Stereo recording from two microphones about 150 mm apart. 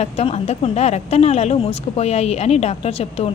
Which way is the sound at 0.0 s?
45° left (ahead or behind).